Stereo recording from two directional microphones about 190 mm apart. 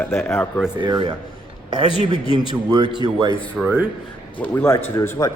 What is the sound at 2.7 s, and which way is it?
Speech, 20° right (ahead or behind).